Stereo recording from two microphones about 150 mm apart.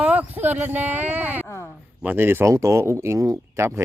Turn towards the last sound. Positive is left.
turn(degrees=-20)  # may be behind; listen again after turning